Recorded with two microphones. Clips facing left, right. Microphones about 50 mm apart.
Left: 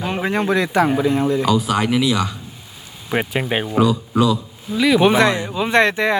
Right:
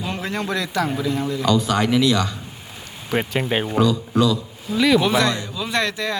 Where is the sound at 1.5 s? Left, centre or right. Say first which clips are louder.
Left 1 dB; centre.